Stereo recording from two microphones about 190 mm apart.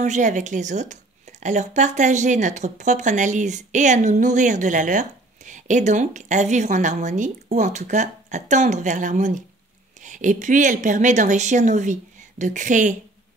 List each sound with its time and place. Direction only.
0.0 s speech: 40° right (ahead or behind)